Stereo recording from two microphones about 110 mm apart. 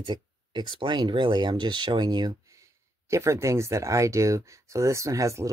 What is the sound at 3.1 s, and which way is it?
Speech, 25° right (ahead or behind).